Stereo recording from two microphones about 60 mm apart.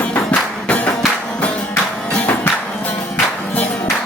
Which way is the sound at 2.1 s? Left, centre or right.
Left.